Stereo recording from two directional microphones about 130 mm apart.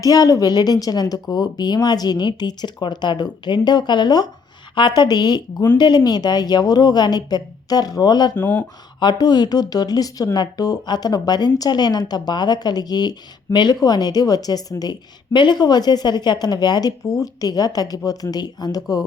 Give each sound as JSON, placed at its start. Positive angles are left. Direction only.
{"t": 0.0, "sound": "speech", "side_deg": 30}
{"t": 8.4, "sound": "speech", "side_deg": 15}
{"t": 9.0, "sound": "a woman's voice", "side_deg": 30}